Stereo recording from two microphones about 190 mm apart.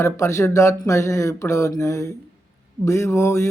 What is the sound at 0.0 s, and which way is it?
Speech, 15° left (ahead or behind).